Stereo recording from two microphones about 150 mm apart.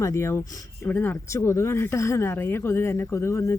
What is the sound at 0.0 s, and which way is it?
Speech, 20° left (ahead or behind).